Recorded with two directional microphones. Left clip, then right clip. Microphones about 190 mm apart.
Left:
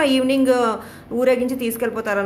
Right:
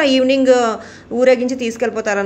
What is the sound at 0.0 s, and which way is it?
A woman's voice, 15° right (ahead or behind).